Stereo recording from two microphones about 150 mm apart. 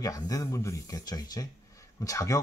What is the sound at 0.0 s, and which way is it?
Speech, 25° left (ahead or behind).